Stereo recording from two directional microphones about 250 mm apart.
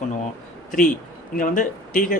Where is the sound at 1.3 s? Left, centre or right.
Left.